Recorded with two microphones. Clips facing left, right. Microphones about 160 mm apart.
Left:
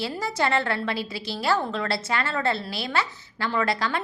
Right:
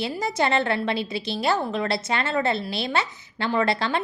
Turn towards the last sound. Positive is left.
turn(degrees=-25)  # may be behind; listen again after turning